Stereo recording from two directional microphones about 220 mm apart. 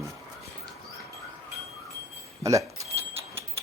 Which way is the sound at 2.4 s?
15° right (ahead or behind).